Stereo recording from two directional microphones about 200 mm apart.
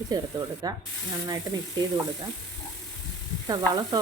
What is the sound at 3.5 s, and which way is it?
Stir, 20° right (ahead or behind).